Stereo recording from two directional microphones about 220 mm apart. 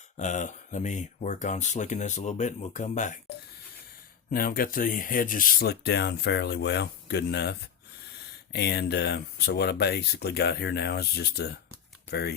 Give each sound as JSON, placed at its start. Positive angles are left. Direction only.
{"t": 0.2, "sound": "speech", "side_deg": 35}
{"t": 4.3, "sound": "speech", "side_deg": 40}
{"t": 8.5, "sound": "speech", "side_deg": 50}